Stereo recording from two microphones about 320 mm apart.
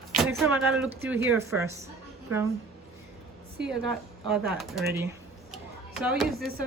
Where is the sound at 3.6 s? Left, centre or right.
Right.